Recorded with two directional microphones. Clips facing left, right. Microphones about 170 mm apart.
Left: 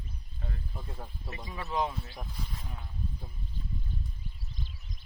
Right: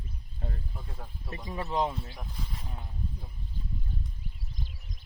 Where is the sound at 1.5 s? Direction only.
25° right (ahead or behind).